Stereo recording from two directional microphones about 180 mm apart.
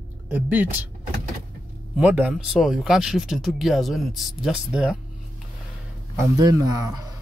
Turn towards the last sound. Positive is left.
turn(degrees=-20)  # may be behind; listen again after turning